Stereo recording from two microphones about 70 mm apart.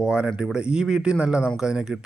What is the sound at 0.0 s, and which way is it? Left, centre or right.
A man's voice, centre.